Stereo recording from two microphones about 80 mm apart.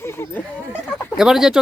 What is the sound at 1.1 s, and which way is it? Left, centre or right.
Speech, centre.